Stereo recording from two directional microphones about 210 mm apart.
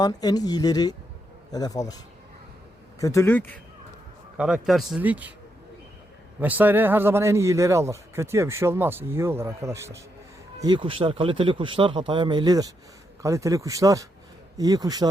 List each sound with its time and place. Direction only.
0.0 s speech: 20° left (ahead or behind)
3.0 s speech: 15° left (ahead or behind)
4.4 s speech: 5° right (ahead or behind)
6.4 s a man's voice: 10° right (ahead or behind)